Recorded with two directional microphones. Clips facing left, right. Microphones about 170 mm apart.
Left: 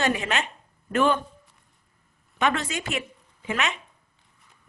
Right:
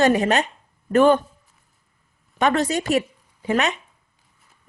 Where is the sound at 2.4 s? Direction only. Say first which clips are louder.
Right 6 dB; 40° right (ahead or behind).